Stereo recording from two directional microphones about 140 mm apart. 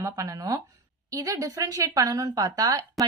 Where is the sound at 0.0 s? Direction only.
25° right (ahead or behind).